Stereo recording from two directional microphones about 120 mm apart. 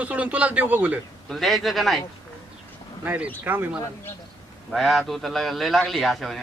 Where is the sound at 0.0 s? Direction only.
10° right (ahead or behind).